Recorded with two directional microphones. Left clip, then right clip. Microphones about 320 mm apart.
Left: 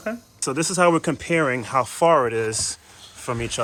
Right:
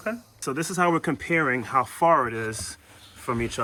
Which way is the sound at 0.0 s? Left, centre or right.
Centre.